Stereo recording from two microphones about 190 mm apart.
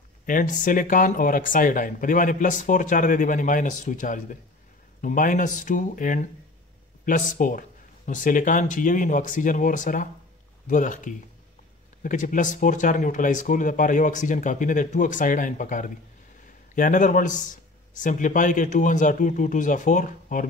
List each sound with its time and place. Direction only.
0.3 s speech: 45° left (ahead or behind)